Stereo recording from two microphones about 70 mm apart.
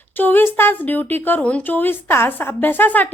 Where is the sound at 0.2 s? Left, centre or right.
Left.